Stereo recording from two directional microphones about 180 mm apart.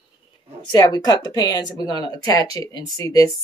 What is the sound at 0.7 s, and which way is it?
Speech, 20° left (ahead or behind).